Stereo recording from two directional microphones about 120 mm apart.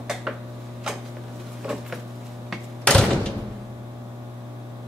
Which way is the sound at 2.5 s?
5° left (ahead or behind).